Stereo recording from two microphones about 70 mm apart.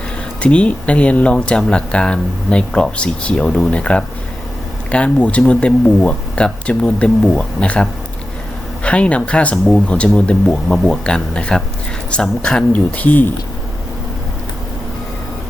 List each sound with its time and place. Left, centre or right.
0.4 s speech: centre